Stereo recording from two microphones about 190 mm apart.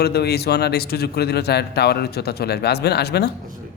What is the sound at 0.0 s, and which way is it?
Speech, 60° left (ahead or behind).